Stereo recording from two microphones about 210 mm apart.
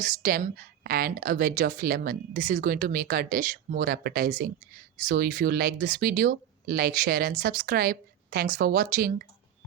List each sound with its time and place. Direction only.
0.0 s a woman's voice: 40° right (ahead or behind)